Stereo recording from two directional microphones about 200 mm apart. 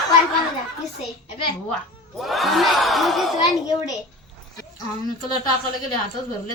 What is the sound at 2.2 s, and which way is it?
Crowd, centre (ahead or behind).